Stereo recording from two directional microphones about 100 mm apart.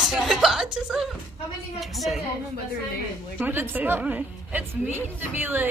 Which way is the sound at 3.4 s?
20° right (ahead or behind).